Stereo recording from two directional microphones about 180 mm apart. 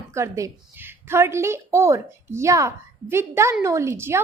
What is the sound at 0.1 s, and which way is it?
A woman's voice, 15° right (ahead or behind).